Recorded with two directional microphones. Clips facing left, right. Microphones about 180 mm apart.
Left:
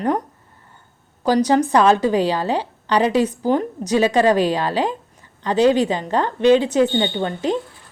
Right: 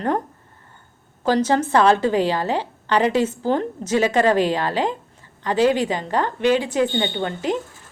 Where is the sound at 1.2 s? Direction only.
15° left (ahead or behind).